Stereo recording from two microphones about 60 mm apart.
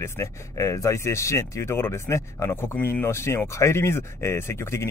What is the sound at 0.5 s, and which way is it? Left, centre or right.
Speech, left.